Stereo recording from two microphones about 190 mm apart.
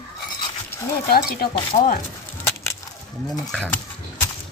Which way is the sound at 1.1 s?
55° left (ahead or behind).